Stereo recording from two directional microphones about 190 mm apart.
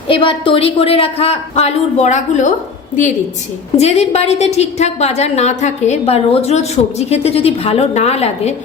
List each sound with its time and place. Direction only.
0.1 s a woman's voice: 25° left (ahead or behind)